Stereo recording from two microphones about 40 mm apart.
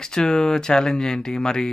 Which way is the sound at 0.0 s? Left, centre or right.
Centre.